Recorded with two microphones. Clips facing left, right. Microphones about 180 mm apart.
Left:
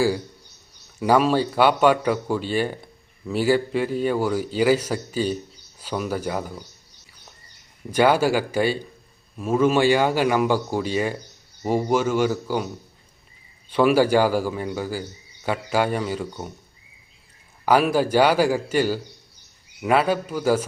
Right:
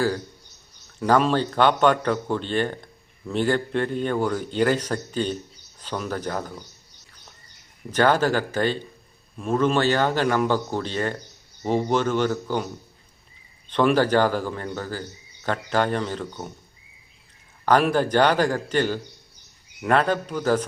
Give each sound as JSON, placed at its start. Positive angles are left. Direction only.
{"t": 0.9, "sound": "speech", "side_deg": 10}
{"t": 7.9, "sound": "speech", "side_deg": 10}
{"t": 13.7, "sound": "speech", "side_deg": 10}
{"t": 17.7, "sound": "speech", "side_deg": 10}